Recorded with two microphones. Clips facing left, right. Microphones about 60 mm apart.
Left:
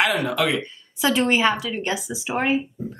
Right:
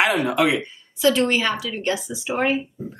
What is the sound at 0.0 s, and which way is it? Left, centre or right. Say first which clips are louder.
Speech: right 2 dB; right.